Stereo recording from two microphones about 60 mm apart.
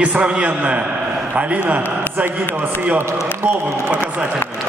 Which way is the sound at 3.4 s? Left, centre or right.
Right.